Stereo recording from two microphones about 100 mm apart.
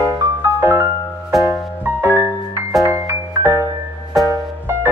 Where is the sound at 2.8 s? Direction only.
30° right (ahead or behind).